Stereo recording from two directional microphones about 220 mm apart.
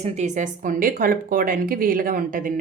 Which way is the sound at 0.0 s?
30° right (ahead or behind).